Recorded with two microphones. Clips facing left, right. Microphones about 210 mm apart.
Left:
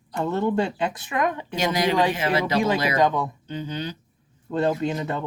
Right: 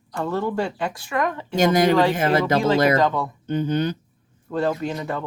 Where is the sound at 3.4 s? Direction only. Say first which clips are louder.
Right 8 dB; 50° right (ahead or behind).